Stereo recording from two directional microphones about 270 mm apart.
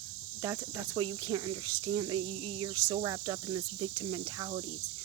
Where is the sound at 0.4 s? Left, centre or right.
Centre.